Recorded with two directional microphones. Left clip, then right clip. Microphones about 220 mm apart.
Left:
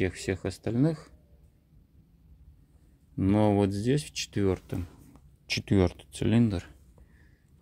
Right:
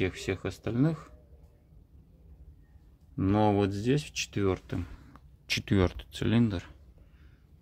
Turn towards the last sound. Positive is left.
turn(degrees=20)  # may be behind; listen again after turning